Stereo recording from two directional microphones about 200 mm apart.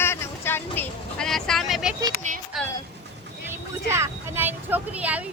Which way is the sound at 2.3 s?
40° right (ahead or behind).